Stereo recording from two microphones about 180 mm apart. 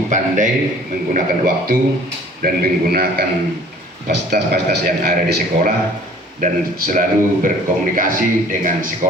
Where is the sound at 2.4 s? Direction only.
55° right (ahead or behind).